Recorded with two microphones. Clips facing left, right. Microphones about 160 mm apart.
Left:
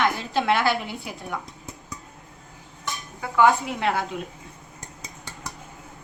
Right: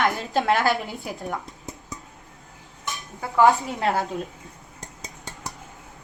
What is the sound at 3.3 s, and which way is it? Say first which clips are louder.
Speech: right 1 dB; 40° right (ahead or behind).